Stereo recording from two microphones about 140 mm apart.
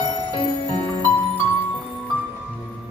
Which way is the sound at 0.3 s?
35° left (ahead or behind).